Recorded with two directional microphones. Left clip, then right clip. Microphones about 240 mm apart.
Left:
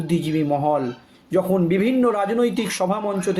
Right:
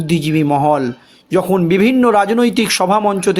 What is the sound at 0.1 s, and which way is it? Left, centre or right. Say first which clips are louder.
Speech: right 7 dB; right.